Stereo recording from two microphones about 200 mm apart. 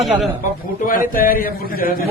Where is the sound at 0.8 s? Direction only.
45° left (ahead or behind).